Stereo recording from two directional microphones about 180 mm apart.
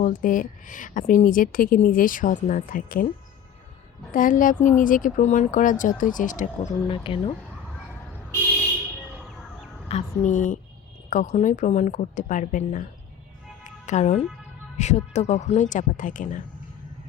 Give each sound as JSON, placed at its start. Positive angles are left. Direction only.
{"t": 0.0, "sound": "speech", "side_deg": 50}
{"t": 4.1, "sound": "speech", "side_deg": 50}
{"t": 6.8, "sound": "speech", "side_deg": 30}
{"t": 9.9, "sound": "speech", "side_deg": 45}
{"t": 13.7, "sound": "music", "side_deg": 40}
{"t": 14.8, "sound": "speech", "side_deg": 40}